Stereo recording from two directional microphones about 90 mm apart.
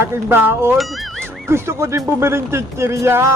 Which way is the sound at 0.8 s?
Centre (ahead or behind).